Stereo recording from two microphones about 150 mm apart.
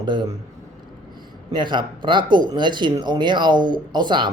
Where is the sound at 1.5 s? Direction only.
30° right (ahead or behind).